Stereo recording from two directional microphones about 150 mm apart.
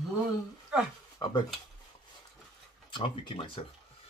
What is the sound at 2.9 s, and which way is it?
Speech, 35° left (ahead or behind).